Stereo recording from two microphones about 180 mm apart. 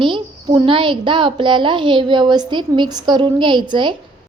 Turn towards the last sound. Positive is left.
turn(degrees=-25)  # may be behind; listen again after turning